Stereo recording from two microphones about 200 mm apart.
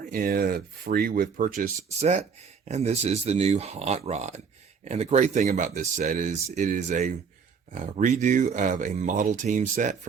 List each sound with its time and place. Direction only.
0.0 s speech: 45° right (ahead or behind)